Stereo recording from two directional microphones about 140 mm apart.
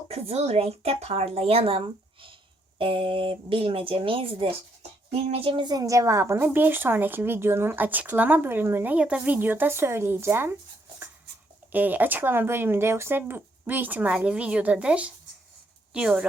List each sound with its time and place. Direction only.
0.1 s a woman's voice: 50° right (ahead or behind); by 10.6 s 15° right (ahead or behind)
11.7 s a woman's voice: 10° right (ahead or behind)